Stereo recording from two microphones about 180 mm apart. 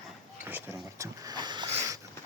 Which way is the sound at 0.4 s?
10° right (ahead or behind).